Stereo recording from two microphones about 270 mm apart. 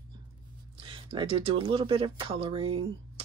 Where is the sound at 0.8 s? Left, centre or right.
Centre.